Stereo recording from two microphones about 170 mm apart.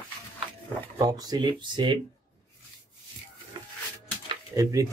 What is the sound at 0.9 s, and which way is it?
Speech, 20° right (ahead or behind).